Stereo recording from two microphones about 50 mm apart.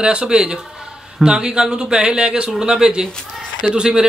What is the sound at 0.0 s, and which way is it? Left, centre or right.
Speech, centre.